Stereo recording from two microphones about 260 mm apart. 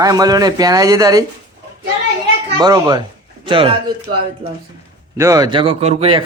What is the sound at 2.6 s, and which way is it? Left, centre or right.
Speech, centre.